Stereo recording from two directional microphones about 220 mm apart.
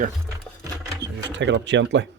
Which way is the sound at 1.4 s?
55° right (ahead or behind).